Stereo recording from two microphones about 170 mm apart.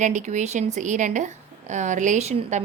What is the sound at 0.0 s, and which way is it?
A woman's voice, 45° right (ahead or behind).